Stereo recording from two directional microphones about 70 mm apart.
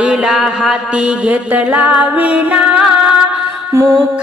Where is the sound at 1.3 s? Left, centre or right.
Right.